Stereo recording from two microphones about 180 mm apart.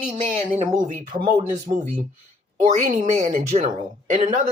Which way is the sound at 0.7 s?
45° right (ahead or behind).